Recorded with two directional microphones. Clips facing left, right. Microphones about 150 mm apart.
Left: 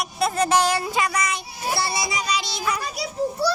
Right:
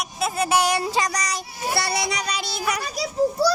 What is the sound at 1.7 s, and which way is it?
A child's voice, 65° right (ahead or behind).